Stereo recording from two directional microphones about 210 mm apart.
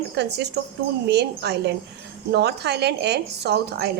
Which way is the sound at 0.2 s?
55° right (ahead or behind).